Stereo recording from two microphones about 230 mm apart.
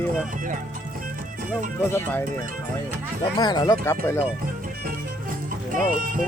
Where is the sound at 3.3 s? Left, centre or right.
Centre.